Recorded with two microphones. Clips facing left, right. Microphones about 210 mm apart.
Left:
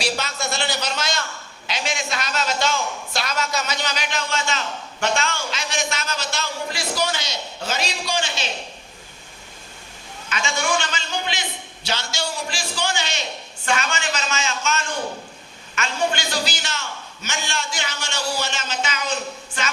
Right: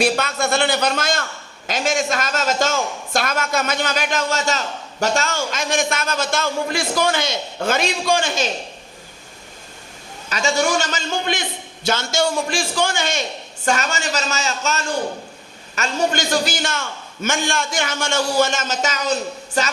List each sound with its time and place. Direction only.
0.0 s a man's voice: 55° right (ahead or behind)
10.2 s a man's voice: 40° right (ahead or behind)